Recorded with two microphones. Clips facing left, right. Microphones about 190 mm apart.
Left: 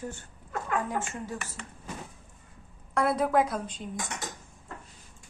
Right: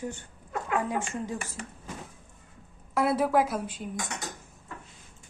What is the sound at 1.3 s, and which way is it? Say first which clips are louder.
Speech: right 2 dB; 40° right (ahead or behind).